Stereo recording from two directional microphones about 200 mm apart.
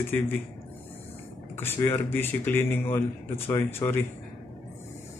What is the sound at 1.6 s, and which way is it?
Speech, 10° left (ahead or behind).